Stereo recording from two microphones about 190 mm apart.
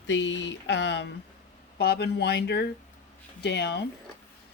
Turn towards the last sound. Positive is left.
turn(degrees=60)  # may be behind; listen again after turning